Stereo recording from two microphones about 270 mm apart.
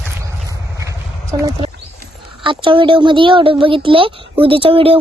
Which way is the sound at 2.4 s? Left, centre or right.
Centre.